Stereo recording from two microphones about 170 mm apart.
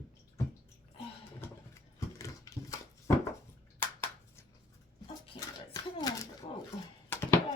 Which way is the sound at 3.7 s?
15° left (ahead or behind).